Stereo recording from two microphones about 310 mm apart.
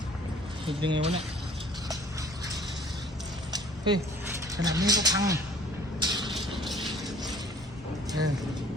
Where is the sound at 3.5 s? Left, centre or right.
Centre.